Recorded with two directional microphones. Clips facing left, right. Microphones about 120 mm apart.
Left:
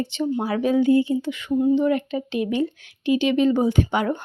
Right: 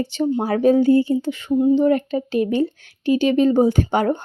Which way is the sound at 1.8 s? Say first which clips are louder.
Right 4 dB; 40° right (ahead or behind).